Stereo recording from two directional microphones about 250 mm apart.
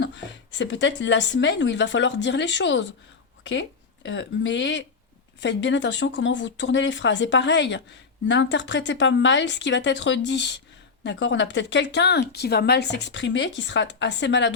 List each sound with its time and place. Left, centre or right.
0.5 s speech: left